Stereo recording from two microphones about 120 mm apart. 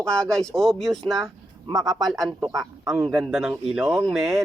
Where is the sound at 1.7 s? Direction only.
30° right (ahead or behind).